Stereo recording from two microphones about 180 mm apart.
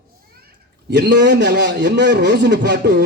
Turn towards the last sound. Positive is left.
turn(degrees=-70)  # may be behind; listen again after turning